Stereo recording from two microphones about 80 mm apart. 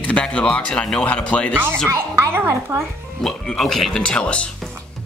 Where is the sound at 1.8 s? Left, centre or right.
Right.